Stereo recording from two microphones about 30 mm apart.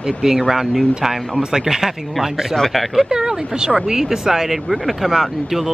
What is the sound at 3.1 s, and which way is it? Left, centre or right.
Speech, right.